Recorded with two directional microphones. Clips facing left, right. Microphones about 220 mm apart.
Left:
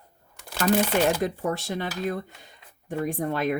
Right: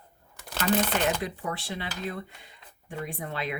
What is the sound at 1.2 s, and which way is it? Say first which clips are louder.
Speech: left 7 dB; 45° left (ahead or behind).